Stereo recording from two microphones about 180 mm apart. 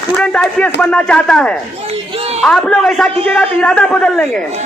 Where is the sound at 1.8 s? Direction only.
35° right (ahead or behind).